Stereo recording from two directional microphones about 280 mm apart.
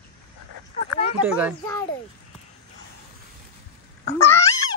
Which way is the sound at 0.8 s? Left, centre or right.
Left.